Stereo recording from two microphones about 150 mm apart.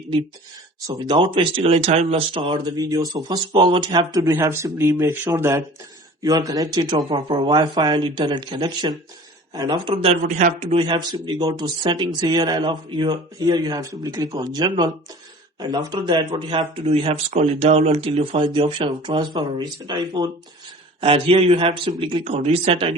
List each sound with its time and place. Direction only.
0.9 s speech: 30° right (ahead or behind); by 10.8 s 50° right (ahead or behind)
10.8 s speech: 30° right (ahead or behind)
21.0 s speech: 40° right (ahead or behind)
22.2 s speech: 45° right (ahead or behind)